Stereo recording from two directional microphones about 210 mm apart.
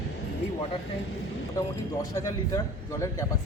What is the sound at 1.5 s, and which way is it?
Speech, 15° left (ahead or behind).